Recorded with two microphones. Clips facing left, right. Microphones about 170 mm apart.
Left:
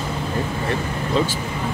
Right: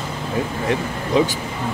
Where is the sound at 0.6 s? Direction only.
15° right (ahead or behind).